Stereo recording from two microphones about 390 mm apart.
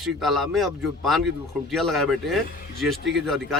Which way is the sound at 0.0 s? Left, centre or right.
Centre.